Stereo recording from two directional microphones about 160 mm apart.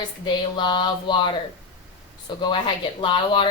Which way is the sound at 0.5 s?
30° left (ahead or behind).